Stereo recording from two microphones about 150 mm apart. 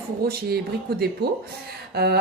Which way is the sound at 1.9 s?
90° right.